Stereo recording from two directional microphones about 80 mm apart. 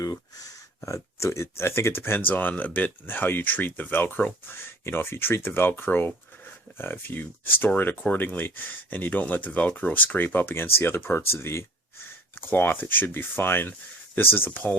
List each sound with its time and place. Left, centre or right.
0.9 s speech: left